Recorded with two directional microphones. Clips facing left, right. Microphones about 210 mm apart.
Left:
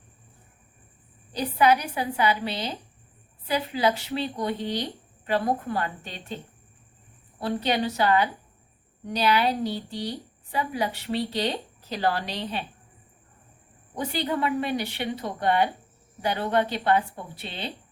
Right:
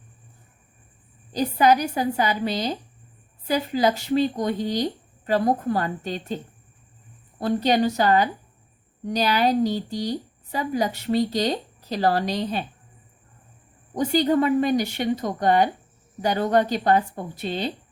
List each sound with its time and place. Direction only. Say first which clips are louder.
1.4 s a woman's voice: right 3 dB; 40° right (ahead or behind)
7.3 s a woman's voice: right 5 dB; 40° right (ahead or behind)
13.9 s a woman's voice: right 8 dB; 40° right (ahead or behind)